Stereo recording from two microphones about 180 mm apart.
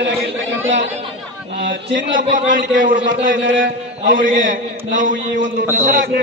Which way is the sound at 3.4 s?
90° right.